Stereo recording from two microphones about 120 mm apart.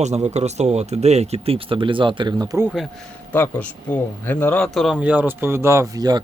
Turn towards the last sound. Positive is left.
turn(degrees=-30)  # may be behind; listen again after turning